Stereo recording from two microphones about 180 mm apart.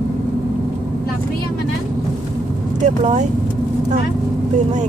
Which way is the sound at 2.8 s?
40° right (ahead or behind).